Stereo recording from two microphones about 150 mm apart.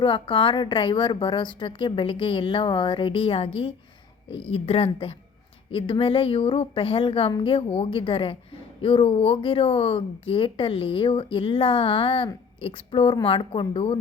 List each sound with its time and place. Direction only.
0.0 s speech: 35° left (ahead or behind)